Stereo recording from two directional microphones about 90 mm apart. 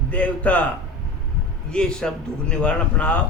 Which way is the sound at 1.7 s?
10° left (ahead or behind).